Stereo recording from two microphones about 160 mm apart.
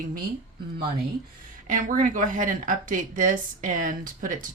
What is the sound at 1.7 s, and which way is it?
A woman's voice, 55° right (ahead or behind).